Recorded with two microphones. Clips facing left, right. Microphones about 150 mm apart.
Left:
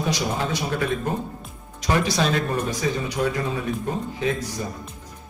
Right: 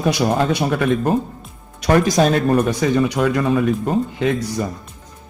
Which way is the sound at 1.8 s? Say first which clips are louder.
Right 7 dB; 55° right (ahead or behind).